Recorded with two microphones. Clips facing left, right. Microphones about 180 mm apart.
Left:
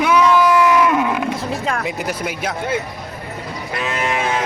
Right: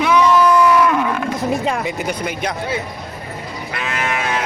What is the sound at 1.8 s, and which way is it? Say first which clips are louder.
Speech: right 1 dB; centre (ahead or behind).